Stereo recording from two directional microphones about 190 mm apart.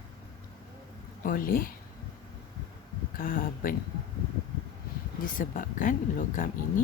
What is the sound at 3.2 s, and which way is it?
Speech, 50° left (ahead or behind).